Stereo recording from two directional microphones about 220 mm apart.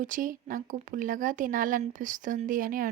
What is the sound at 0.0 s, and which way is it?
A woman's voice, 35° right (ahead or behind).